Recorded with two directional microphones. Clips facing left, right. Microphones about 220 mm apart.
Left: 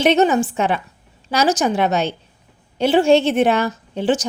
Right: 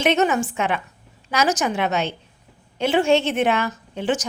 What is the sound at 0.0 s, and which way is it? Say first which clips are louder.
A woman's voice: left 4 dB; 35° left (ahead or behind).